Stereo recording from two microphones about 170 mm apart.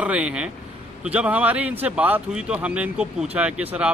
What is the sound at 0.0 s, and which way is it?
Speech, 5° right (ahead or behind).